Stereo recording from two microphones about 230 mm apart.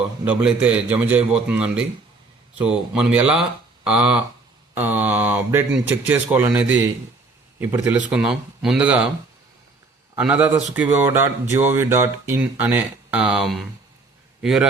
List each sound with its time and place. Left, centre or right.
0.3 s speech: centre
10.2 s speech: centre